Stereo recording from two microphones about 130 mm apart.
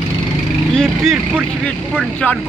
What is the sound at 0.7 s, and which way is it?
Speech, 5° left (ahead or behind).